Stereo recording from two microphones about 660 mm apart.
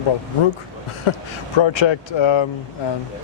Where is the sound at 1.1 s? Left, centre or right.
Left.